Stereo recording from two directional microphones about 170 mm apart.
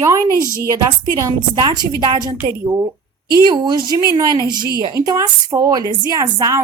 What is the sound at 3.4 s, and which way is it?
A woman's voice, 25° right (ahead or behind).